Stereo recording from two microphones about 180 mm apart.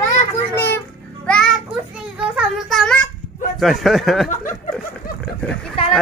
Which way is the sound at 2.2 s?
Centre (ahead or behind).